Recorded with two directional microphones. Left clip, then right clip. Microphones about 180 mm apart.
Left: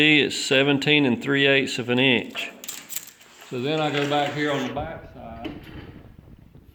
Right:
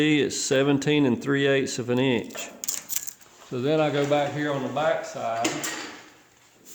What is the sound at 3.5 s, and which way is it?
Speech, 30° right (ahead or behind).